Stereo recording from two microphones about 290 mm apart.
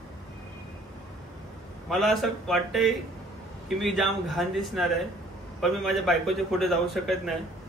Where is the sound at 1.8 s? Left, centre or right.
Centre.